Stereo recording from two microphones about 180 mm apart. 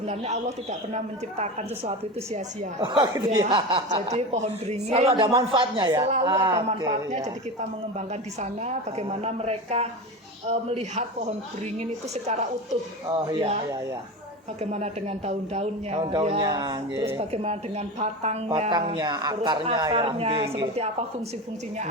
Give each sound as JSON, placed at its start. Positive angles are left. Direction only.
{"t": 0.0, "sound": "a woman's voice", "side_deg": -35}
{"t": 2.8, "sound": "a woman's voice", "side_deg": -25}
{"t": 13.1, "sound": "a woman's voice", "side_deg": -30}
{"t": 14.6, "sound": "a woman's voice", "side_deg": -35}
{"t": 17.2, "sound": "a woman's voice", "side_deg": -35}
{"t": 18.7, "sound": "speech", "side_deg": -25}